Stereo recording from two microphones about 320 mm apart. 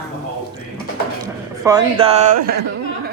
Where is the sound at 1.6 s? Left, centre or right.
Centre.